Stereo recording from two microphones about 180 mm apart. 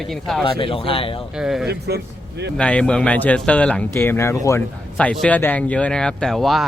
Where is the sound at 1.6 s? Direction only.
65° right (ahead or behind).